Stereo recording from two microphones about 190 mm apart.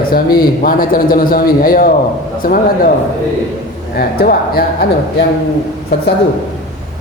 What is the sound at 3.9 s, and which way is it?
Speech, 50° left (ahead or behind).